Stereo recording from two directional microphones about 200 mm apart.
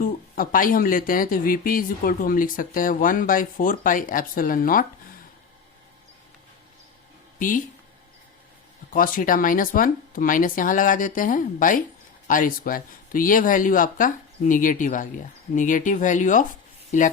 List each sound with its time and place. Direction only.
0.0 s speech: 45° left (ahead or behind)
7.3 s speech: 40° left (ahead or behind)
8.9 s speech: 45° left (ahead or behind)